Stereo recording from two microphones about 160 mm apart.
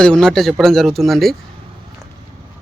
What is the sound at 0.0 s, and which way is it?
Speech, 5° left (ahead or behind).